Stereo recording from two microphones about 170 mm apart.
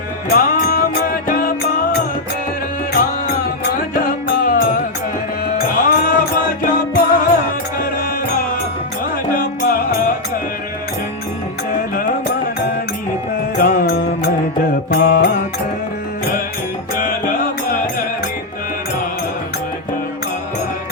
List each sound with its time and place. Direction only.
0.3 s music: 60° left (ahead or behind)
9.3 s music: 60° left (ahead or behind)
13.6 s music: 60° left (ahead or behind)
14.9 s mantra: 65° left (ahead or behind)